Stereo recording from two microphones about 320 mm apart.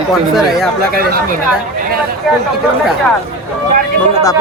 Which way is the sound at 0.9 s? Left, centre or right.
Right.